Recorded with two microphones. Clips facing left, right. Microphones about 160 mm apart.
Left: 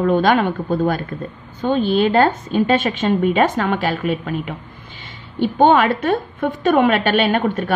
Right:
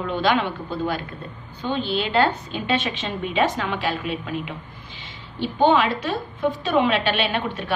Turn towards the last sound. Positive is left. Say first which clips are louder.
# left 7 dB
turn(degrees=50)  # may be behind; listen again after turning